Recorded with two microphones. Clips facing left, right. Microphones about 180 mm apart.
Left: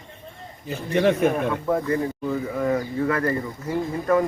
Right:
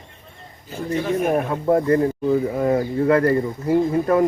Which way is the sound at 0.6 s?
75° left (ahead or behind).